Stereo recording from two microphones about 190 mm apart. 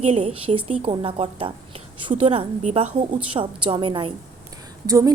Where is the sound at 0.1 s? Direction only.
30° right (ahead or behind).